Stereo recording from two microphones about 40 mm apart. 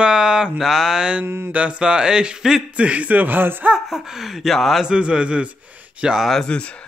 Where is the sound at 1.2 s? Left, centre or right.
Right.